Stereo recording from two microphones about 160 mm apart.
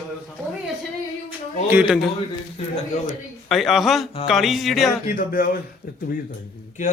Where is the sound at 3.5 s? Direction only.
Centre (ahead or behind).